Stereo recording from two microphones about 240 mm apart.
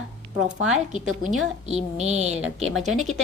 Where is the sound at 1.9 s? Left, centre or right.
Right.